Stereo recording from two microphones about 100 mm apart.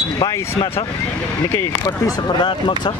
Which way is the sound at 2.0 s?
50° left (ahead or behind).